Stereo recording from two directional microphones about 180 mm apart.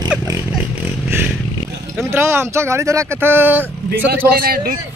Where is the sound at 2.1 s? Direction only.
15° right (ahead or behind).